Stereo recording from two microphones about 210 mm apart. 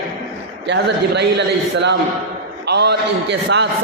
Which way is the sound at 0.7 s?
55° right (ahead or behind).